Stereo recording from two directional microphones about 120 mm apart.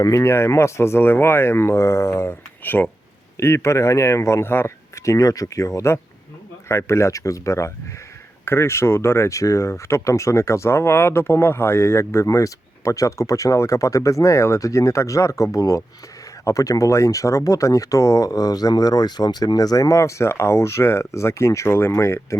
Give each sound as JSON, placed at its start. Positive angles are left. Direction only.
{"t": 0.0, "sound": "speech", "side_deg": 25}